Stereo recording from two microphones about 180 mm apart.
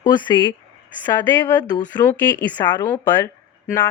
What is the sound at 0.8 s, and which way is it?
Speech, 10° left (ahead or behind).